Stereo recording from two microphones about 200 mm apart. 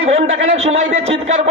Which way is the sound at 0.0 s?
35° right (ahead or behind).